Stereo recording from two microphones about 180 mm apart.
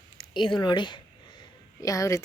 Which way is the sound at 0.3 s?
25° left (ahead or behind).